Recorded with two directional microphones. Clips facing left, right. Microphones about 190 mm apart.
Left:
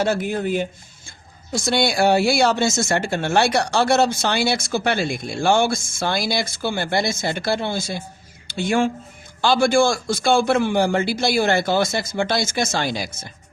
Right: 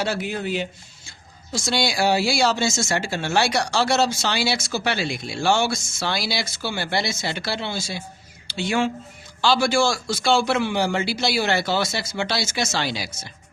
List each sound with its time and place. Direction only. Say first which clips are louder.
0.0 s speech: left 4 dB; 50° left (ahead or behind)